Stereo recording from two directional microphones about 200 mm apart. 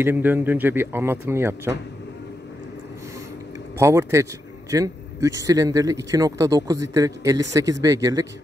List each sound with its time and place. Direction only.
0.0 s speech: 10° right (ahead or behind)
3.7 s speech: 15° right (ahead or behind)